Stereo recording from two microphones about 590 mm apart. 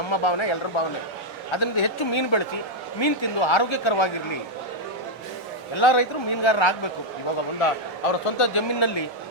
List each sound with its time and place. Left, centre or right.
0.1 s speech: left
5.7 s speech: left
7.6 s speech: left